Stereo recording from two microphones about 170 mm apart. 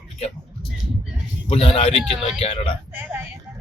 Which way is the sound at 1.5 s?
35° left (ahead or behind).